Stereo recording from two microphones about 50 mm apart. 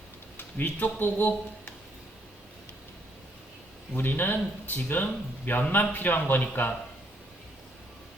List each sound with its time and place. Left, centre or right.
0.5 s speech: left
3.9 s speech: left